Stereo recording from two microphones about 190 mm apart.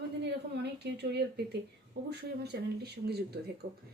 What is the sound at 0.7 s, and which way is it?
Speech, 60° right (ahead or behind).